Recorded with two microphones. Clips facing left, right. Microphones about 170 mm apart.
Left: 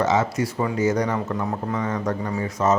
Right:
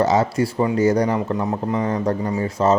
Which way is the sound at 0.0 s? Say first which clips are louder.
Right 3 dB; 35° right (ahead or behind).